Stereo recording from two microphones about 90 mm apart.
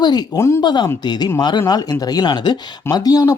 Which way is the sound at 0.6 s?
50° left (ahead or behind).